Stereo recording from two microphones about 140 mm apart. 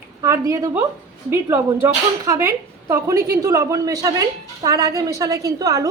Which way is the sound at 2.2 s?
20° right (ahead or behind).